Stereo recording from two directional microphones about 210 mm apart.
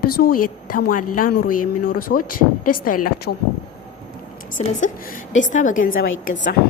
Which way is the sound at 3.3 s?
60° left (ahead or behind).